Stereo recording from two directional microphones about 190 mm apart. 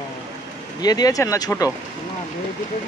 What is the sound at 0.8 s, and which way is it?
Speech, 20° left (ahead or behind).